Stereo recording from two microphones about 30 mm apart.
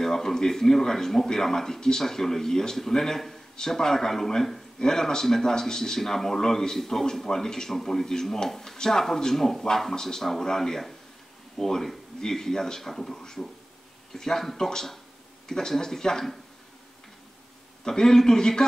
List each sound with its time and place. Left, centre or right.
0.0 s a man's voice: centre
17.8 s a man's voice: centre